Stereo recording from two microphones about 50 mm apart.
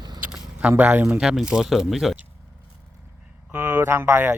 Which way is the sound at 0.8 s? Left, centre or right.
Right.